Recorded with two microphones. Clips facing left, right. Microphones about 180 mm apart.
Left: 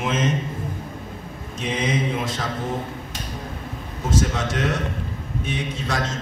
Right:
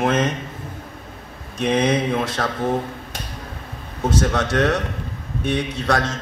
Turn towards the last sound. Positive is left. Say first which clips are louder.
# right 5 dB
turn(degrees=-65)  # may be behind; listen again after turning